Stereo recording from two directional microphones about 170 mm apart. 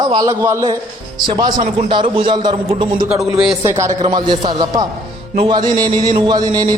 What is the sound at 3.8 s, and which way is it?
A man's voice, 20° right (ahead or behind).